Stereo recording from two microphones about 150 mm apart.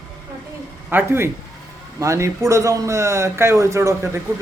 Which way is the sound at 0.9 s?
15° right (ahead or behind).